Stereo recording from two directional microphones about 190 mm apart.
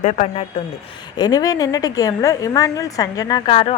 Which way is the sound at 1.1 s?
20° left (ahead or behind).